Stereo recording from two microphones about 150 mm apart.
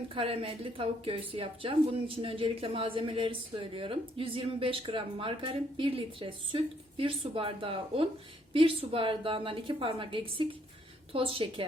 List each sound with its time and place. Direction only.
0.1 s a woman's voice: 40° right (ahead or behind)